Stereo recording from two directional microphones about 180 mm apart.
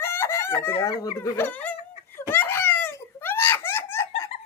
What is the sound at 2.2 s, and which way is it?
Wail, 10° left (ahead or behind).